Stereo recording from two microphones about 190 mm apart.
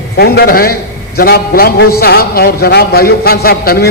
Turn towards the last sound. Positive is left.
turn(degrees=50)  # may be behind; listen again after turning